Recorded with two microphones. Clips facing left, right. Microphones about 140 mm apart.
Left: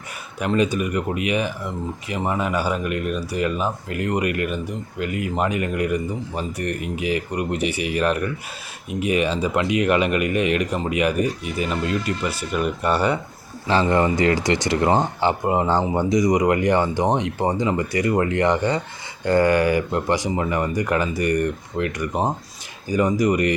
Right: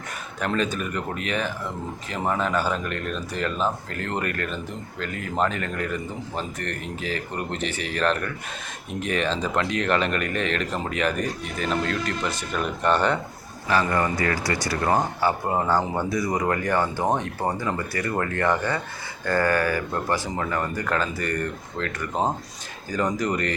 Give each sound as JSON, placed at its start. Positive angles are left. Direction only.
{"t": 0.3, "sound": "speech", "side_deg": 10}
{"t": 13.7, "sound": "speech", "side_deg": 25}